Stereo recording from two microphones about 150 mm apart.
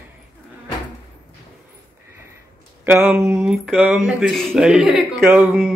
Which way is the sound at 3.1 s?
15° right (ahead or behind).